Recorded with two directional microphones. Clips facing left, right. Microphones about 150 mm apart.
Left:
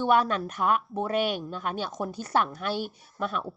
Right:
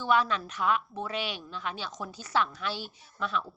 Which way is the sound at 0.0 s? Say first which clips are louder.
Left 3 dB; 55° left (ahead or behind).